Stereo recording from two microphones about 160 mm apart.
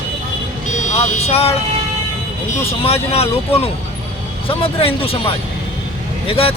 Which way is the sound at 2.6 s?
40° left (ahead or behind).